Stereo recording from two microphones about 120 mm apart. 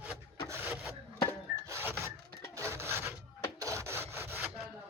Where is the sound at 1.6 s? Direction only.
20° right (ahead or behind).